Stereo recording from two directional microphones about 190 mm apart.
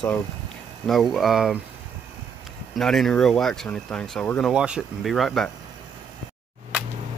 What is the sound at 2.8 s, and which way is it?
Speech, centre (ahead or behind).